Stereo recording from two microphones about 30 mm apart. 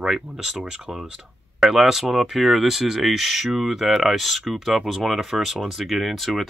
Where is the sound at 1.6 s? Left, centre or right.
Centre.